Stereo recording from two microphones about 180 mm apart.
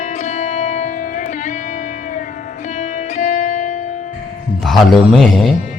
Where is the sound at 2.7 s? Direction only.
45° left (ahead or behind).